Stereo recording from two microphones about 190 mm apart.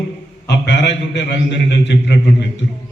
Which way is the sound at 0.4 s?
65° left (ahead or behind).